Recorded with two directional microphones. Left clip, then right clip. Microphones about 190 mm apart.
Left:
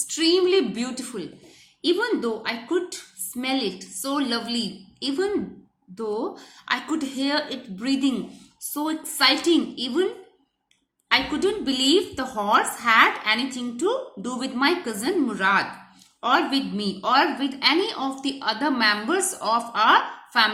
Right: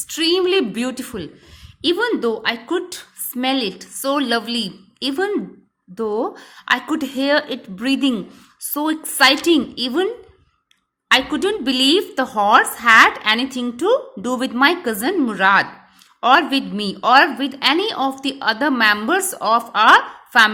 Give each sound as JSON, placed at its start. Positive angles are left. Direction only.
{"t": 0.1, "sound": "a woman's voice", "side_deg": -45}
{"t": 11.1, "sound": "a woman's voice", "side_deg": -45}